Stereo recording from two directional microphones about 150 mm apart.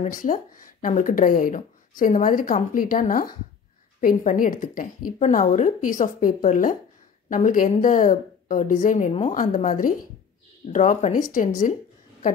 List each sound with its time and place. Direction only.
0.0 s speech: 65° left (ahead or behind)